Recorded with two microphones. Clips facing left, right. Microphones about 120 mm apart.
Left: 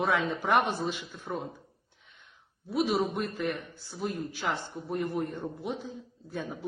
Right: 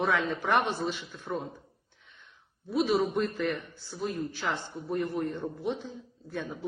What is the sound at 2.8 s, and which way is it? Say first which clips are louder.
A man's voice: right 3 dB; 10° left (ahead or behind).